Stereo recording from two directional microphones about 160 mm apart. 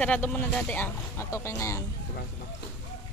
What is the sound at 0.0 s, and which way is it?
Speech, 10° left (ahead or behind).